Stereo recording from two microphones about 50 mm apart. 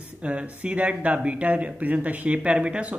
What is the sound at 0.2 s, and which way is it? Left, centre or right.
A man's voice, right.